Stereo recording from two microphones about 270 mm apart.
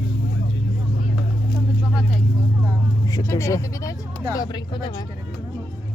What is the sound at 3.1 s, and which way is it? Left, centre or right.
Vehicle, centre.